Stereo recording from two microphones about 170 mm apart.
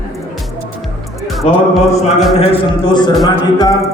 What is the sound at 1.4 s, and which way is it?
Mantra, 35° left (ahead or behind).